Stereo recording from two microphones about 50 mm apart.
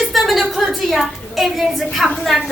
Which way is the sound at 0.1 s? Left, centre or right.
Centre.